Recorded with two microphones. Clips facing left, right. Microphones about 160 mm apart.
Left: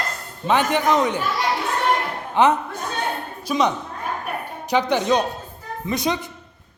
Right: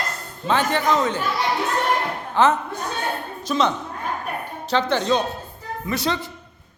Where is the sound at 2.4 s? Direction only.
20° left (ahead or behind).